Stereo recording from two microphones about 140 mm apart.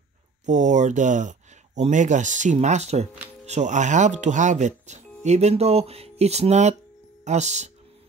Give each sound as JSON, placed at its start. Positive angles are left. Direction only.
{"t": 0.5, "sound": "speech", "side_deg": -60}